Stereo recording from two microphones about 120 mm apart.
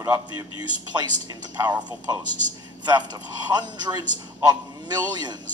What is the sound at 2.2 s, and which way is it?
Speech, 90° right.